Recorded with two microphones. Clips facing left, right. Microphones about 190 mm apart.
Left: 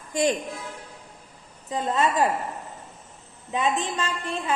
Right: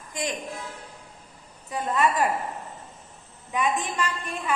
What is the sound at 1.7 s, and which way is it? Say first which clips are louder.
Speech: even; 20° left (ahead or behind).